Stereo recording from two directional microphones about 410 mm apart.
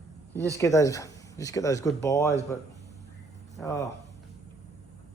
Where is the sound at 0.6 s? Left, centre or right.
Centre.